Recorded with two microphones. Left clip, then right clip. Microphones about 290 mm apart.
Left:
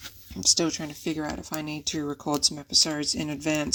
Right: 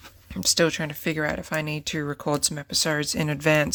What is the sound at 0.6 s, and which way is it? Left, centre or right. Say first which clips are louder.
Speech: right 5 dB; right.